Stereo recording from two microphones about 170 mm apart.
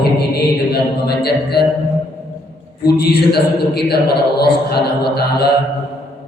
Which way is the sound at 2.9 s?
70° left (ahead or behind).